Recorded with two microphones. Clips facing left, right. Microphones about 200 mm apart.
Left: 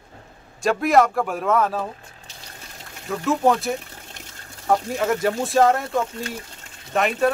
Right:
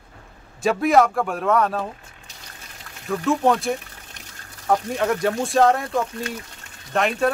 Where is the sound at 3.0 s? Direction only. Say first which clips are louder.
Even; centre (ahead or behind).